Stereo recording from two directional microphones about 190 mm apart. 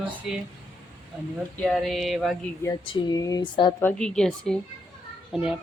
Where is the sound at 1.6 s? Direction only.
Centre (ahead or behind).